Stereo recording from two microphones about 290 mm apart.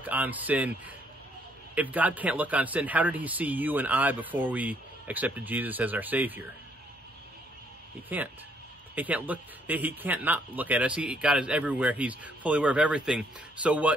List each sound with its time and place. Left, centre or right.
0.0 s speech: centre
8.1 s speech: centre